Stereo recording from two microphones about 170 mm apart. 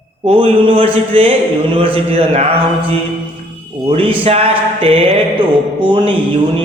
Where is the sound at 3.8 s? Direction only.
35° right (ahead or behind).